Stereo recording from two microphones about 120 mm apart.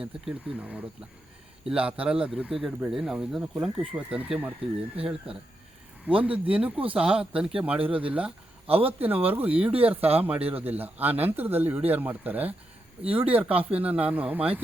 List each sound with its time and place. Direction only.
0.0 s speech: 10° right (ahead or behind)
5.3 s speech: 50° right (ahead or behind)
6.1 s speech: 10° right (ahead or behind)